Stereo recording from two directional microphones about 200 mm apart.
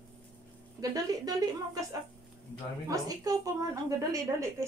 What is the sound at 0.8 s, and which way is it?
Speech, 20° right (ahead or behind).